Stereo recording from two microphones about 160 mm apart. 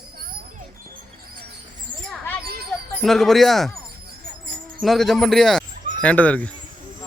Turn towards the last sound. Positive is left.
turn(degrees=10)  # may be behind; listen again after turning